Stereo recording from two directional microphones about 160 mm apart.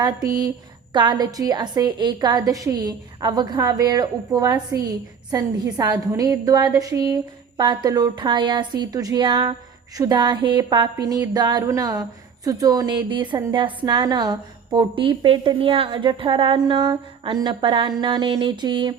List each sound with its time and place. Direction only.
0.9 s a woman's voice: 30° right (ahead or behind)